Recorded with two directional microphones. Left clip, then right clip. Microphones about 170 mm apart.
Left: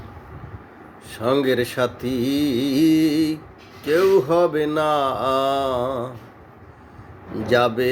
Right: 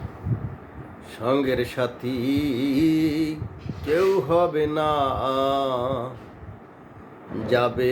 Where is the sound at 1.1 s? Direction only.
45° left (ahead or behind).